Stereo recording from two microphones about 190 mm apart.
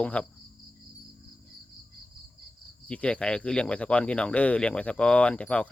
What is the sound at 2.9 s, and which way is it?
Speech, 5° left (ahead or behind).